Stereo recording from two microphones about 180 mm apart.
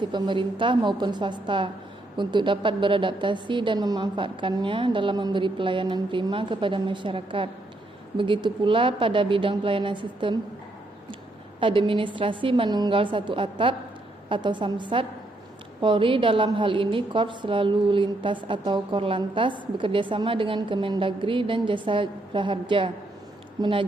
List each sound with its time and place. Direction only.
0.0 s a woman's voice: 25° right (ahead or behind)
11.6 s a woman's voice: 30° right (ahead or behind)